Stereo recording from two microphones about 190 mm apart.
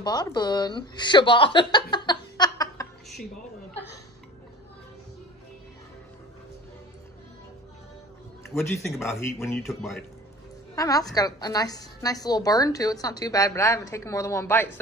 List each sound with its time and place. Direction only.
0.0 s speech: 20° left (ahead or behind)
8.5 s speech: centre (ahead or behind)
9.1 s speech: 15° left (ahead or behind)
9.6 s speech: centre (ahead or behind)
10.7 s a woman's voice: 20° left (ahead or behind)